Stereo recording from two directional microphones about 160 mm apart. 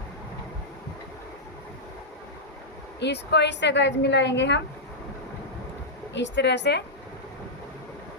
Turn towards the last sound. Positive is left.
turn(degrees=90)